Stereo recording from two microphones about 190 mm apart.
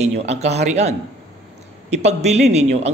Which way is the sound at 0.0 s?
35° right (ahead or behind).